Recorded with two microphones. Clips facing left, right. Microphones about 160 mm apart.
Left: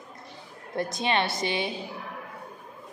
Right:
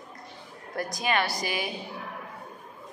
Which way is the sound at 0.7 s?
25° left (ahead or behind).